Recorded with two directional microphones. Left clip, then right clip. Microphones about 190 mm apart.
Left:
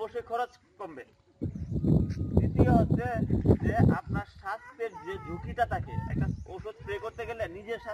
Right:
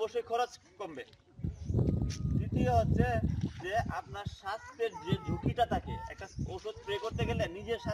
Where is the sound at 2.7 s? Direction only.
25° right (ahead or behind).